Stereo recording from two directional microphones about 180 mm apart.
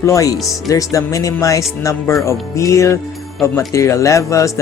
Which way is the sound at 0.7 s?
20° left (ahead or behind).